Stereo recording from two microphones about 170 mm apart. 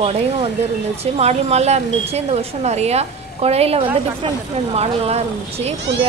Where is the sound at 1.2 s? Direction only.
40° right (ahead or behind).